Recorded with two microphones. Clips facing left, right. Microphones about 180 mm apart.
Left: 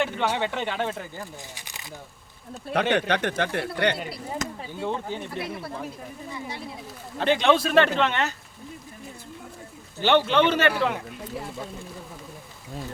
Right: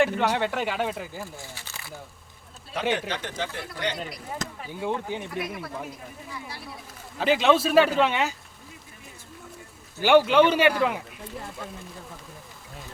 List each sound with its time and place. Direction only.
0.0 s speech: 5° right (ahead or behind)
1.4 s speech: 15° left (ahead or behind)
2.7 s speech: 55° left (ahead or behind)
4.8 s speech: 10° right (ahead or behind)
5.4 s speech: 30° left (ahead or behind)
7.2 s speech: 5° right (ahead or behind)
10.0 s speech: 10° right (ahead or behind)